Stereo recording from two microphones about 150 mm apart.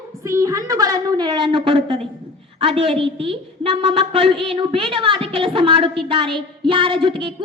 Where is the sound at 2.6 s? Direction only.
40° right (ahead or behind).